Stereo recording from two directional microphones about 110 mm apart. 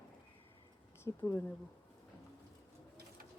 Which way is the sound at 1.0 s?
20° left (ahead or behind).